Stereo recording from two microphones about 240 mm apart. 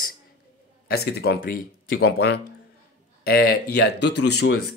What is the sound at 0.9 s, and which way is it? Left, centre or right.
Speech, left.